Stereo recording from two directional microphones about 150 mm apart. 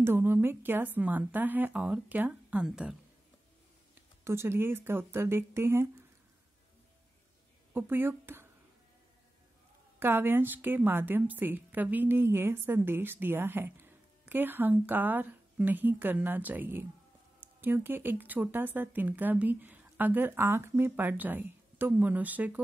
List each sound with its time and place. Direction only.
0.0 s a woman's voice: 15° right (ahead or behind)
4.2 s a woman's voice: 20° right (ahead or behind)
7.7 s speech: 15° right (ahead or behind)
9.9 s a woman's voice: 15° right (ahead or behind)